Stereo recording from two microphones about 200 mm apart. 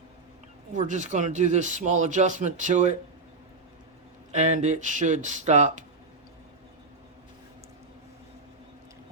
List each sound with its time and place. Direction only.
0.7 s speech: 40° right (ahead or behind)
4.3 s speech: 35° right (ahead or behind)